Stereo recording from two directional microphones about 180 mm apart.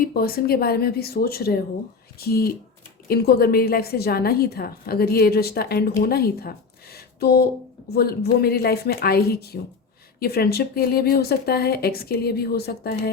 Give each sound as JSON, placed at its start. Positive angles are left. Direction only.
{"t": 0.0, "sound": "a woman's voice", "side_deg": 55}